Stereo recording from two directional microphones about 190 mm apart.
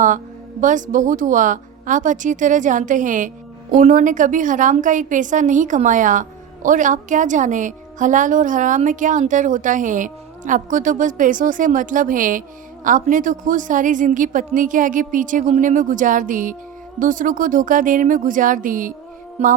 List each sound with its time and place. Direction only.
0.6 s speech: 40° right (ahead or behind)
19.4 s music: 35° right (ahead or behind)